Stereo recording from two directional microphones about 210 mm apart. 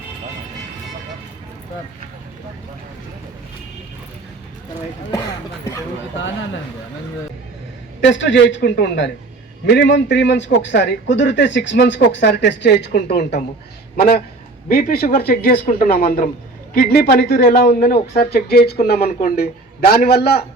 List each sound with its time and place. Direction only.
8.0 s a man's voice: 60° left (ahead or behind)
14.7 s speech: 45° left (ahead or behind)
17.7 s speech: 40° left (ahead or behind)